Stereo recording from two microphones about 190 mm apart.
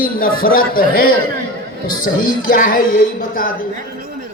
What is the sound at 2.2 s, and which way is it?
A man's voice, 50° left (ahead or behind).